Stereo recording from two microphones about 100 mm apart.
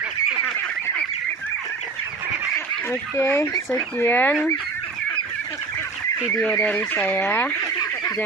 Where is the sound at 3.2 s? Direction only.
25° left (ahead or behind).